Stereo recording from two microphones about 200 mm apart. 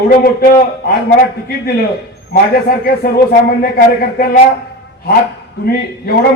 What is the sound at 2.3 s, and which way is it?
A man's voice, 50° left (ahead or behind).